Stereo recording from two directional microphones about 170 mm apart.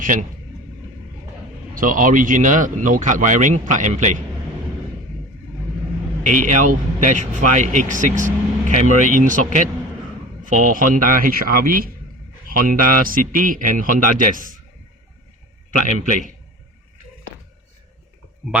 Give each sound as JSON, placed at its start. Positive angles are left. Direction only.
{"t": 0.0, "sound": "speech", "side_deg": -50}
{"t": 1.7, "sound": "speech", "side_deg": -55}
{"t": 6.2, "sound": "speech", "side_deg": -45}